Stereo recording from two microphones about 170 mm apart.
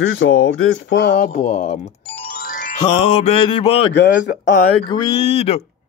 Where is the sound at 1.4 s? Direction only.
55° left (ahead or behind).